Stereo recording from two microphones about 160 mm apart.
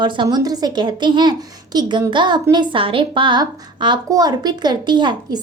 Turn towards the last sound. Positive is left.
turn(degrees=-30)  # may be behind; listen again after turning